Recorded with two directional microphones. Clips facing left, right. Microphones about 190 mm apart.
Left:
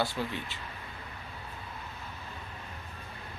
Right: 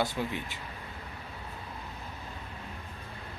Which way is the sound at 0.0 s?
15° right (ahead or behind).